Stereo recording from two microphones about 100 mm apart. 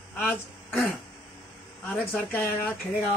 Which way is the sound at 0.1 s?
15° left (ahead or behind).